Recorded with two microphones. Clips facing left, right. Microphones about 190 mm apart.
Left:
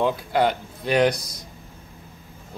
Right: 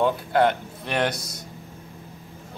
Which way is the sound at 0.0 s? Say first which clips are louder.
Right 1 dB; centre (ahead or behind).